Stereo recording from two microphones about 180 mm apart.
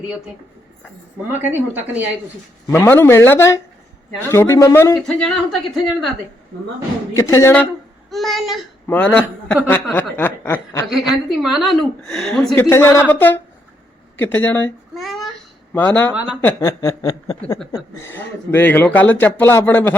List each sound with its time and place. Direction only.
1.3 s speech: 10° right (ahead or behind)
2.7 s speech: 15° left (ahead or behind)
4.9 s a woman's voice: centre (ahead or behind)
7.2 s speech: 15° left (ahead or behind)
8.1 s a woman's voice: centre (ahead or behind)
10.8 s a woman's voice: centre (ahead or behind)
12.6 s speech: 15° left (ahead or behind)
14.9 s a sound: centre (ahead or behind)
15.7 s speech: 10° left (ahead or behind)
16.1 s a woman's voice: 5° right (ahead or behind)
16.4 s speech: 15° left (ahead or behind)
17.4 s speech: 5° left (ahead or behind)